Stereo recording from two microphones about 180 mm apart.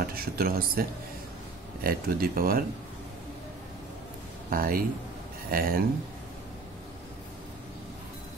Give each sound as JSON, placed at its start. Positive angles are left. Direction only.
{"t": 0.0, "sound": "speech", "side_deg": -55}
{"t": 4.5, "sound": "speech", "side_deg": -55}